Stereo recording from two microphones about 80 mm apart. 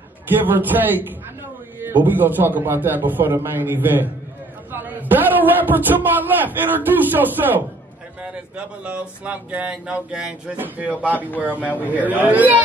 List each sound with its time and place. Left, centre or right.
0.3 s a man's voice: right